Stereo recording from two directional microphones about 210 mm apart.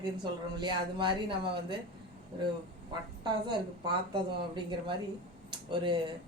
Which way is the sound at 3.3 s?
20° right (ahead or behind).